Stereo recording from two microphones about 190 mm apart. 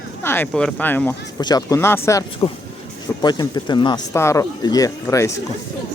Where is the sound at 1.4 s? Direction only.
20° left (ahead or behind).